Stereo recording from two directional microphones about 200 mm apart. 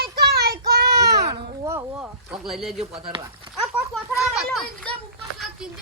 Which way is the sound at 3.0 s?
25° right (ahead or behind).